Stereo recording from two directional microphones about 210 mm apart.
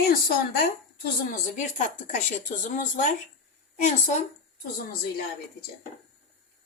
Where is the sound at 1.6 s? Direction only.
35° left (ahead or behind).